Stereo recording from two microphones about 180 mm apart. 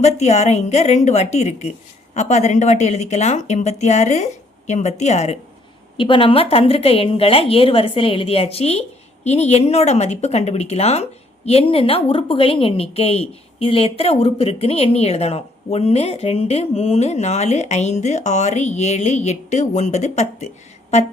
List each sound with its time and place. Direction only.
0.0 s a woman's voice: 40° left (ahead or behind)